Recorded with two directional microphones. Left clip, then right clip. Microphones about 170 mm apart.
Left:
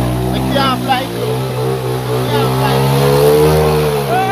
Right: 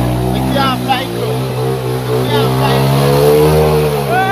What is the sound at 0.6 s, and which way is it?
Vehicle, 55° left (ahead or behind).